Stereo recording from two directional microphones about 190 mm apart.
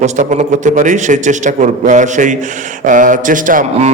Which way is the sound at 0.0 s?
40° right (ahead or behind).